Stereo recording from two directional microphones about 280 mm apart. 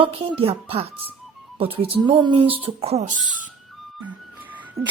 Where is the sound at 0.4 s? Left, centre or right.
Centre.